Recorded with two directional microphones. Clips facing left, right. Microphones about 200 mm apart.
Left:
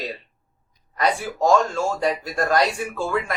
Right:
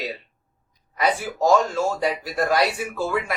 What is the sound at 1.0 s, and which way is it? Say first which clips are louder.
Speech: even; 5° right (ahead or behind).